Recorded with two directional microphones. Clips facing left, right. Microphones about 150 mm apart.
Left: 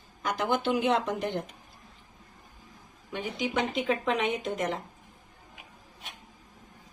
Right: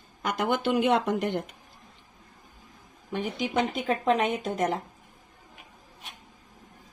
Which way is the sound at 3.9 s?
40° right (ahead or behind).